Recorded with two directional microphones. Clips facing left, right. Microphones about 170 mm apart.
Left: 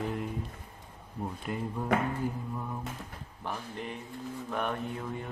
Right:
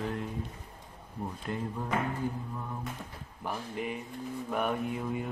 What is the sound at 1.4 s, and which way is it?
Speech, 5° left (ahead or behind).